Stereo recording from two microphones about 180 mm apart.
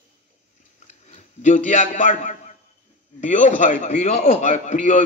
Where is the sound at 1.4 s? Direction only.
45° left (ahead or behind).